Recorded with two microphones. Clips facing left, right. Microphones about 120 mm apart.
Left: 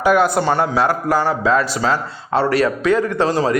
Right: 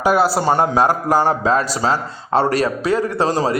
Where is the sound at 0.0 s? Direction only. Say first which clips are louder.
Left 1 dB; 35° right (ahead or behind).